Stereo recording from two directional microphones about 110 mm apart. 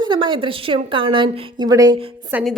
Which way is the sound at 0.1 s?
50° right (ahead or behind).